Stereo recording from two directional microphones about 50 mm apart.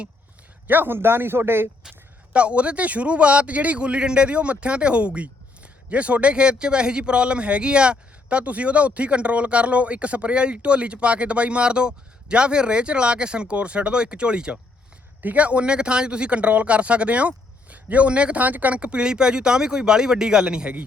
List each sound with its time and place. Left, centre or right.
0.7 s speech: right
2.3 s a man's voice: right
15.2 s a man's voice: right
18.8 s speech: right